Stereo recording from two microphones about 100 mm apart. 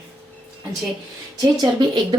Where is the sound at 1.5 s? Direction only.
45° right (ahead or behind).